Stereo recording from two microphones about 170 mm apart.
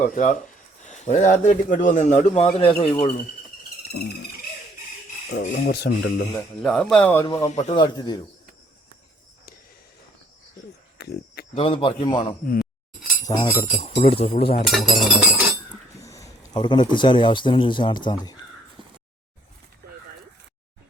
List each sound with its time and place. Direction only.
0.0 s a man's voice: 50° left (ahead or behind)
5.3 s speech: 65° left (ahead or behind); by 6.2 s 90° left
6.6 s chink: 5° left (ahead or behind)
6.9 s speech: 10° left (ahead or behind)
7.3 s speech: 40° left (ahead or behind)
7.7 s speech: 25° left (ahead or behind)
10.9 s cricket: 70° left (ahead or behind)
11.5 s speech: 35° left (ahead or behind)
13.6 s speech: 35° left (ahead or behind)
14.7 s chink: centre (ahead or behind)
16.0 s a sound: 20° left (ahead or behind)
16.6 s speech: 25° left (ahead or behind)
18.8 s a sound: 30° right (ahead or behind)